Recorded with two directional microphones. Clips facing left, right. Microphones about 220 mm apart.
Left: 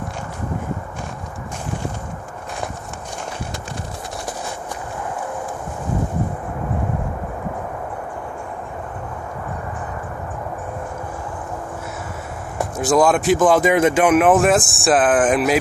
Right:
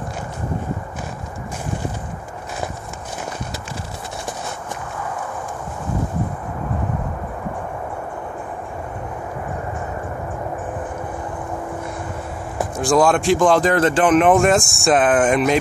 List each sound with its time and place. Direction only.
12.9 s speech: 5° left (ahead or behind)